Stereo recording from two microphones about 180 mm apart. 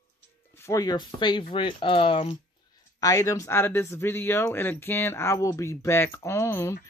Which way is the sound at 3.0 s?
20° left (ahead or behind).